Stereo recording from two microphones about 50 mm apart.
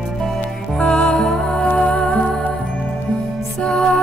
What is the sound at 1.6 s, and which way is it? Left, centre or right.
Music, left.